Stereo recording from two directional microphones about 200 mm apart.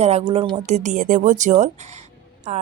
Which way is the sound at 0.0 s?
30° right (ahead or behind).